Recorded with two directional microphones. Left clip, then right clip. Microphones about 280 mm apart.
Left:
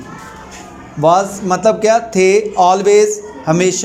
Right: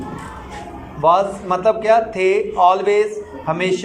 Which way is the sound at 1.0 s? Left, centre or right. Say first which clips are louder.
Left 3 dB; left.